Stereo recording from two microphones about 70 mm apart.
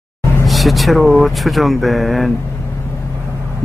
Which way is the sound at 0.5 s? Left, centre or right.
Centre.